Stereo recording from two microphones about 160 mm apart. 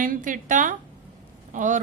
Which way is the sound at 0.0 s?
55° right (ahead or behind).